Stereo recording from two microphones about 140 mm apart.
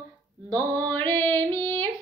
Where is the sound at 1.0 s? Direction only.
15° left (ahead or behind).